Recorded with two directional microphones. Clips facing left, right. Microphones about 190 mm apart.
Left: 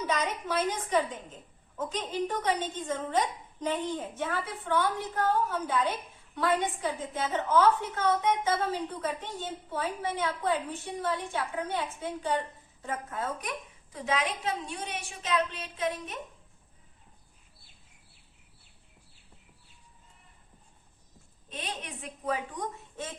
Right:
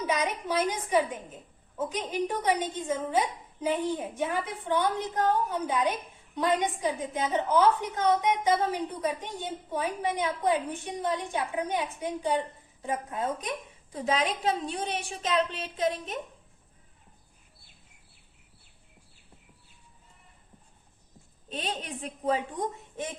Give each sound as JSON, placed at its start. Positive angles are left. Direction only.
{"t": 0.0, "sound": "a woman's voice", "side_deg": -10}
{"t": 13.9, "sound": "a woman's voice", "side_deg": -30}
{"t": 21.5, "sound": "a woman's voice", "side_deg": -35}